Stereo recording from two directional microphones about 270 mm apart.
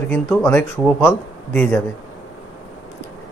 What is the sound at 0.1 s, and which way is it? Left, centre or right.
A man's voice, centre.